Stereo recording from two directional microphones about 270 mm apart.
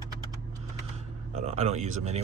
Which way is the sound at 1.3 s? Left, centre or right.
Right.